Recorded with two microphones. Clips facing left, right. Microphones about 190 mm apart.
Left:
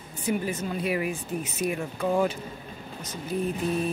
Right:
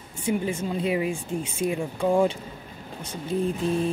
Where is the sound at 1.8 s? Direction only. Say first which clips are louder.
Right 5 dB; 15° right (ahead or behind).